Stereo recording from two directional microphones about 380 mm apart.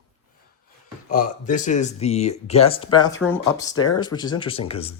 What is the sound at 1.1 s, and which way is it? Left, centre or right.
Speech, left.